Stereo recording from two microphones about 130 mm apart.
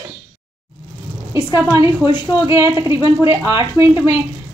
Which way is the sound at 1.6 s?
20° right (ahead or behind).